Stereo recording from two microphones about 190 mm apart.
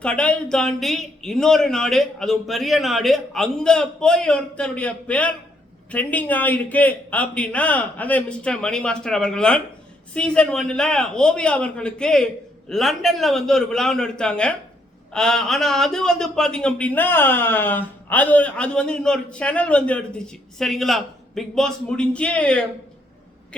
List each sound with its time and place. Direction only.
0.0 s a man's voice: 5° left (ahead or behind)